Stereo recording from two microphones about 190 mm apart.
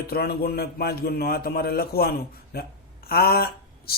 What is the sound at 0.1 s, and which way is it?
Speech, 55° left (ahead or behind).